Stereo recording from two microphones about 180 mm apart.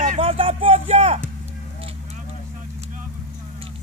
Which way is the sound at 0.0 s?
35° right (ahead or behind).